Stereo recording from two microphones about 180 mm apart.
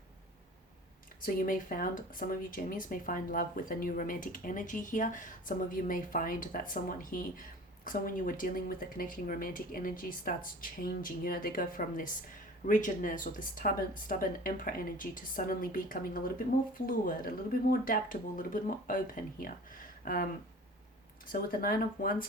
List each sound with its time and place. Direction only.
1.2 s speech: 50° left (ahead or behind)
21.5 s speech: 55° left (ahead or behind)